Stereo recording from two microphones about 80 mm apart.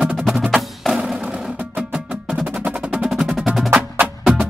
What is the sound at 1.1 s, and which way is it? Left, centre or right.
Music, centre.